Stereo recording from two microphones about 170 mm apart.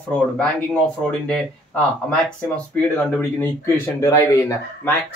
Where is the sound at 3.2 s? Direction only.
15° left (ahead or behind).